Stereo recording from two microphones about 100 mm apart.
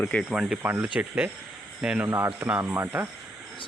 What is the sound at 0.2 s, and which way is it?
Speech, 5° right (ahead or behind).